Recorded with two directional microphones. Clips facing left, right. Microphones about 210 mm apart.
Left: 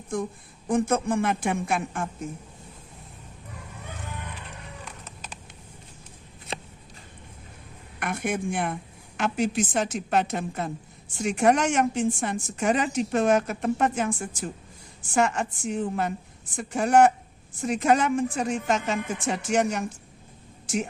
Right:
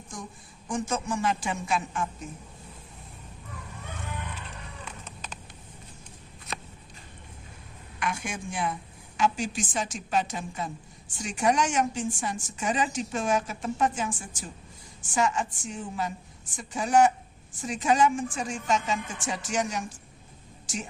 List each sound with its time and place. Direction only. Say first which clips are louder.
0.1 s a woman's voice: left 12 dB; 55° left (ahead or behind)
4.9 s a sound: even; 5° left (ahead or behind)
7.9 s a woman's voice: left 5 dB; 55° left (ahead or behind)